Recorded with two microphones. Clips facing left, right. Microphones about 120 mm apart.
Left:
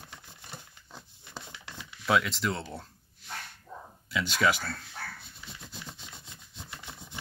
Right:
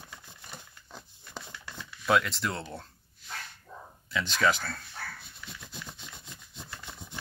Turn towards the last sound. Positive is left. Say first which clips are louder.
# even
turn(degrees=20)  # may be behind; listen again after turning